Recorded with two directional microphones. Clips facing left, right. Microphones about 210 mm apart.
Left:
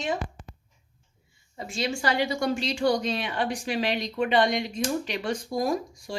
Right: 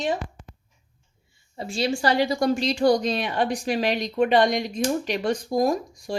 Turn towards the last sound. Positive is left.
turn(degrees=-45)  # may be behind; listen again after turning